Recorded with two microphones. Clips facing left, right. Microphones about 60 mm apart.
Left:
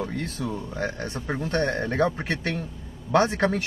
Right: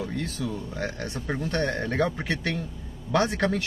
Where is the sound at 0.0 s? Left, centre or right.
Left.